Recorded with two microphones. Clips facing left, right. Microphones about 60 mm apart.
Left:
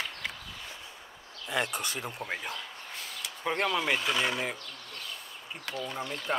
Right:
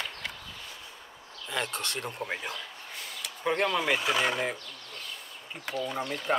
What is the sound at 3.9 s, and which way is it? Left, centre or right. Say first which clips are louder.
Speech: right 2 dB; centre.